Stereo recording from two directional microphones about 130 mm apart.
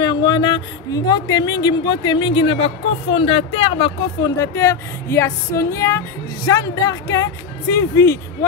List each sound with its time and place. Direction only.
0.0 s speech: 35° left (ahead or behind)
4.2 s speech: 20° left (ahead or behind)